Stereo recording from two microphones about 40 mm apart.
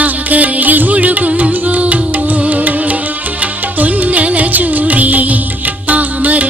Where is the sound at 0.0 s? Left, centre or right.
Right.